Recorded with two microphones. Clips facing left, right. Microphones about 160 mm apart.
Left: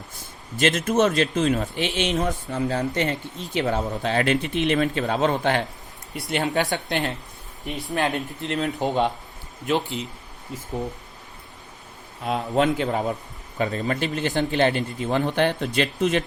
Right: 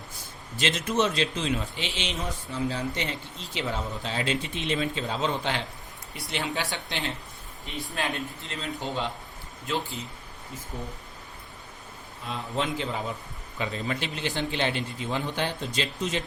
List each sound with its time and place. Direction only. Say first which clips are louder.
0.6 s a man's voice: left 6 dB; 50° left (ahead or behind)
4.0 s a man's voice: left 8 dB; 60° left (ahead or behind)
7.6 s a man's voice: left 7 dB; 65° left (ahead or behind)
9.6 s speech: left 7 dB; 70° left (ahead or behind)
12.2 s a man's voice: left 9 dB; 65° left (ahead or behind)